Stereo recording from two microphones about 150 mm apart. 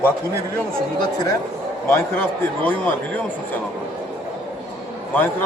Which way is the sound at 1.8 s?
15° left (ahead or behind).